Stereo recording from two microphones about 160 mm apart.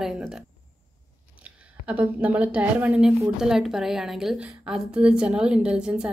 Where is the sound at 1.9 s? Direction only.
10° right (ahead or behind).